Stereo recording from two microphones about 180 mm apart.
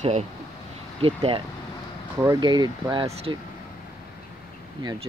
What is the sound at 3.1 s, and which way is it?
Speech, 35° right (ahead or behind).